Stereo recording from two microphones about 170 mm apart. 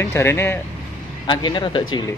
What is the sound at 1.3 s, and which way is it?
Speech, 25° left (ahead or behind).